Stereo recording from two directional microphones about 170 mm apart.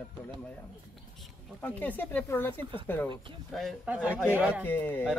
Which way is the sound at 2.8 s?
10° left (ahead or behind).